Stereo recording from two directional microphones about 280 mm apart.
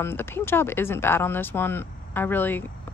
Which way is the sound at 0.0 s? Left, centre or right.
Centre.